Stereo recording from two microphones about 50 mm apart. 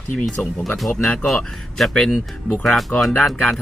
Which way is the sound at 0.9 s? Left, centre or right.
Left.